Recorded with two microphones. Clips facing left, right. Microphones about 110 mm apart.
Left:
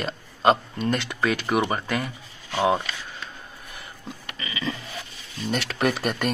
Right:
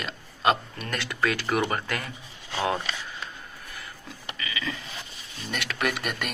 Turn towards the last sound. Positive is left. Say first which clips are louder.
# left 5 dB
turn(degrees=35)  # may be behind; listen again after turning